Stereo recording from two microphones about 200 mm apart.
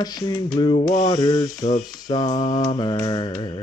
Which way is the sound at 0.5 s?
20° left (ahead or behind).